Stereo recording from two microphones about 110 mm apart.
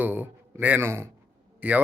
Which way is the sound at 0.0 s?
15° right (ahead or behind).